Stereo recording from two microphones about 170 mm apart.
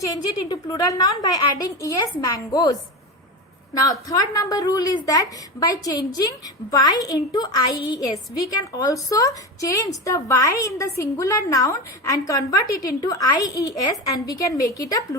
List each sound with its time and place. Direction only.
0.0 s a woman's voice: 25° left (ahead or behind)
3.8 s a woman's voice: 20° left (ahead or behind)